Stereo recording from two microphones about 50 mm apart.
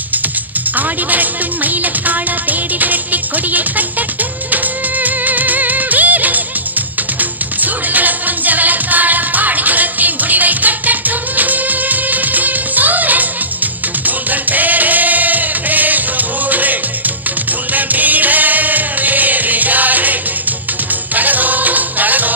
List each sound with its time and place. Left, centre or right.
0.7 s music: right
17.7 s music: right